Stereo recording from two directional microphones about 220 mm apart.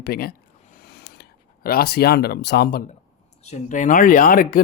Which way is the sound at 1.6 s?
45° left (ahead or behind).